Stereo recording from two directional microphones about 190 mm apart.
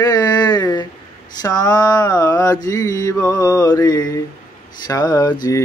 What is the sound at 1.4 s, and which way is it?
Mantra, 20° left (ahead or behind).